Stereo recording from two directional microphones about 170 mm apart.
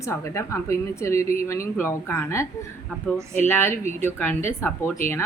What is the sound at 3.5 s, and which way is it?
A woman's voice, 15° left (ahead or behind).